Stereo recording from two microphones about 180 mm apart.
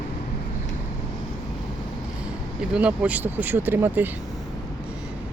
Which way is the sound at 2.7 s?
5° right (ahead or behind).